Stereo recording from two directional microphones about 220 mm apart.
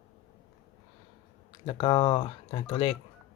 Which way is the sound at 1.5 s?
20° left (ahead or behind).